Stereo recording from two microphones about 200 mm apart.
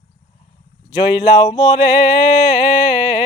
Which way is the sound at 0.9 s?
20° left (ahead or behind).